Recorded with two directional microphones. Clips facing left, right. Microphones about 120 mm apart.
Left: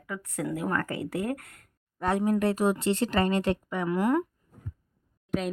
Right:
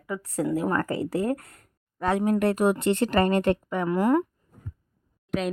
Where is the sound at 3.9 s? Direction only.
35° right (ahead or behind).